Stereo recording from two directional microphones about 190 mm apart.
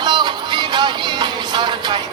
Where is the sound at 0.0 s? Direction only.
25° right (ahead or behind).